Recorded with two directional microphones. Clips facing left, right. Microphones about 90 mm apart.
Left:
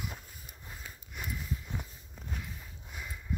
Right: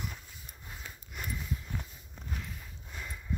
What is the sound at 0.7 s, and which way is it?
Sniff, centre (ahead or behind).